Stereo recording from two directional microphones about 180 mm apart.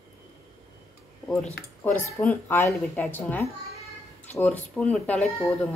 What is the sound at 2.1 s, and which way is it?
Speech, 10° left (ahead or behind).